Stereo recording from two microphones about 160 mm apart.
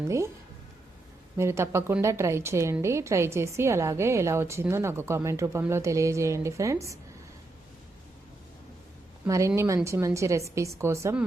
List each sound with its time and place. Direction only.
0.0 s a woman's voice: 15° right (ahead or behind)
1.4 s a woman's voice: 15° right (ahead or behind)
9.2 s a woman's voice: 20° right (ahead or behind)